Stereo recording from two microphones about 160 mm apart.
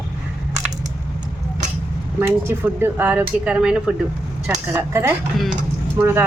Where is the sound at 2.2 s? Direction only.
15° right (ahead or behind).